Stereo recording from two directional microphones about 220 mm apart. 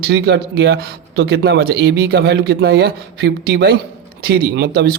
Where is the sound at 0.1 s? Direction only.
45° right (ahead or behind).